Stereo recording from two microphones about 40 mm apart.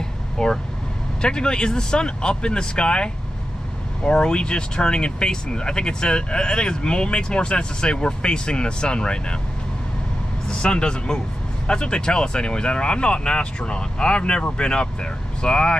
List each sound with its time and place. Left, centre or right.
0.4 s speech: centre
10.5 s speech: left